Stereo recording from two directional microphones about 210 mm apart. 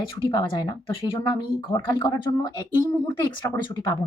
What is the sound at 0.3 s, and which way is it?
Speech, 20° left (ahead or behind).